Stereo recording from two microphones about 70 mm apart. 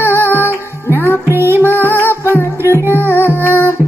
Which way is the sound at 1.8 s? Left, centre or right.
Left.